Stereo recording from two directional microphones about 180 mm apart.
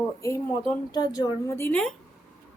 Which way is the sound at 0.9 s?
20° left (ahead or behind).